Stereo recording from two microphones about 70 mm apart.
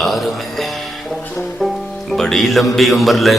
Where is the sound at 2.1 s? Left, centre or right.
Centre.